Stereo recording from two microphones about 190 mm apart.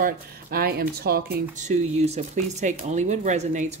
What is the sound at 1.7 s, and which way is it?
Speech, 35° right (ahead or behind).